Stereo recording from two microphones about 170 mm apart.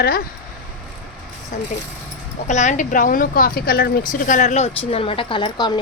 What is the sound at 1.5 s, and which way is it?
Speech, 50° left (ahead or behind).